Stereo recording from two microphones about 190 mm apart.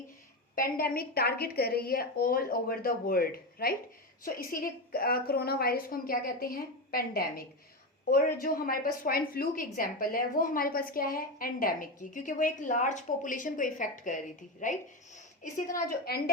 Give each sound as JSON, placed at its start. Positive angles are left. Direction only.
{"t": 0.5, "sound": "a woman's voice", "side_deg": 50}